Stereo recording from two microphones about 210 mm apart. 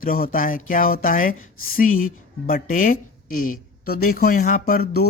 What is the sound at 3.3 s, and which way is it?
Speech, 40° left (ahead or behind).